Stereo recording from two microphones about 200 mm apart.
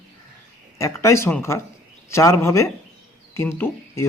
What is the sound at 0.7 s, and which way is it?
A man's voice, 15° left (ahead or behind).